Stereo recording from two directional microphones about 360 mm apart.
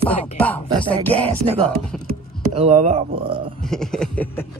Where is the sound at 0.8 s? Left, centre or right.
Centre.